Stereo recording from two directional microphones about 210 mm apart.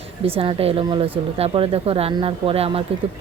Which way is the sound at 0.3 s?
25° right (ahead or behind).